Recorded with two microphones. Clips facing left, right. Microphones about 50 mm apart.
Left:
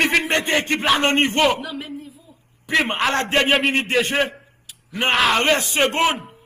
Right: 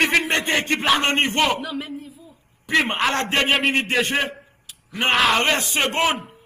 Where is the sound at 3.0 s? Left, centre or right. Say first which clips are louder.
Left 2 dB; centre.